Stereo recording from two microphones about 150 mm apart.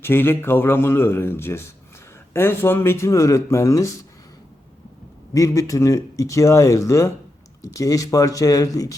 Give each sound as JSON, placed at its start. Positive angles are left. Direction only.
{"t": 0.0, "sound": "speech", "side_deg": 15}
{"t": 5.3, "sound": "speech", "side_deg": 20}